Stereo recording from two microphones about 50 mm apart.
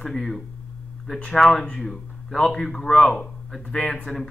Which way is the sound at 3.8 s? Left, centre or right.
Centre.